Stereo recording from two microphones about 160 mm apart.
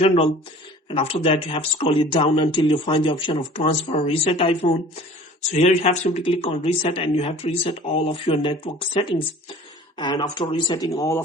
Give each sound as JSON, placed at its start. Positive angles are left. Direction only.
{"t": 0.9, "sound": "speech", "side_deg": 35}
{"t": 5.4, "sound": "speech", "side_deg": 45}